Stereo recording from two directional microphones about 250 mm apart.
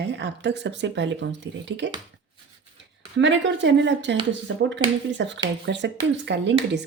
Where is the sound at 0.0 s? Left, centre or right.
Right.